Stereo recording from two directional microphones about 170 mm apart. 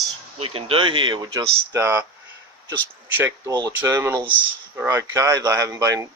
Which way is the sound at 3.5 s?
20° right (ahead or behind).